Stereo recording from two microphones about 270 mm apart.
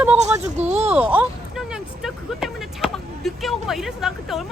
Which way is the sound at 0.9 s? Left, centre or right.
Centre.